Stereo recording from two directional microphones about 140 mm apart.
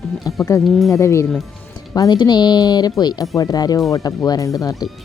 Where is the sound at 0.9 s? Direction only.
20° left (ahead or behind).